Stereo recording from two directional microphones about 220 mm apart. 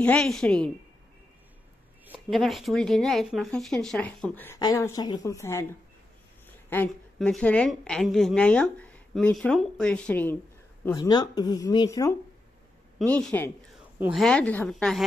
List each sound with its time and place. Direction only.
0.0 s speech: 5° left (ahead or behind)
2.0 s speech: centre (ahead or behind)
10.9 s speech: 15° left (ahead or behind)
13.9 s speech: 5° right (ahead or behind)